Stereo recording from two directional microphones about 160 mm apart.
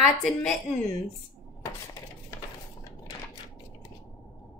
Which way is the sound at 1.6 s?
20° left (ahead or behind).